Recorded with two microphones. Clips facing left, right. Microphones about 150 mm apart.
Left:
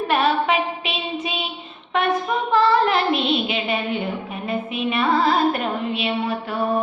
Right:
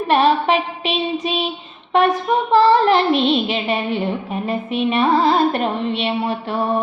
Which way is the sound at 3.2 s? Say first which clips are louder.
Right 4 dB; 35° right (ahead or behind).